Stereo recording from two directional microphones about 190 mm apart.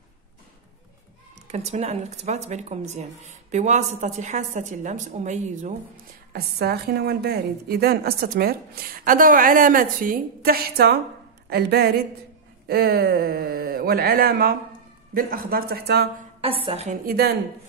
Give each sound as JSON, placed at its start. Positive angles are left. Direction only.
{"t": 1.5, "sound": "speech", "side_deg": -35}
{"t": 6.3, "sound": "a woman's voice", "side_deg": -55}
{"t": 16.3, "sound": "speech", "side_deg": -30}